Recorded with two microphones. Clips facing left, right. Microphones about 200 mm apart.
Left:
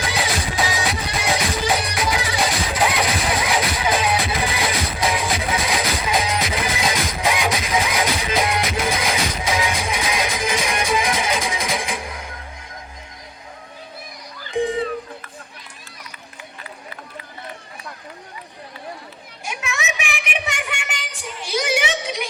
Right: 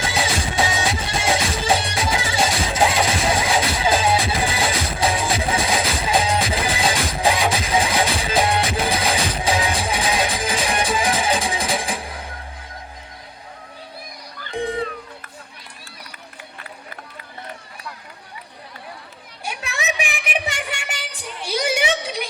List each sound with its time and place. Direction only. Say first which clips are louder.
0.0 s music: right 1 dB; 25° right (ahead or behind)
14.4 s music: left 4 dB; 60° right (ahead or behind)
19.5 s a sound: even; 35° right (ahead or behind)